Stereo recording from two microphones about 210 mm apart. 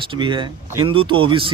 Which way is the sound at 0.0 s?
20° right (ahead or behind).